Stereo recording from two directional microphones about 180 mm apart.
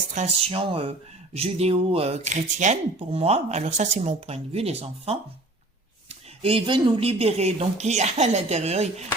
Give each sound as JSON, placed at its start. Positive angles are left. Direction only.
{"t": 0.1, "sound": "speech", "side_deg": -40}